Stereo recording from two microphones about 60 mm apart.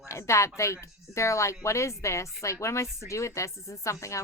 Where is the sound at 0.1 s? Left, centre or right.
Left.